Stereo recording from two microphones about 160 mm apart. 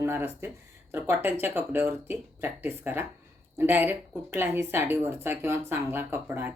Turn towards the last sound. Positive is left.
turn(degrees=-15)  # may be behind; listen again after turning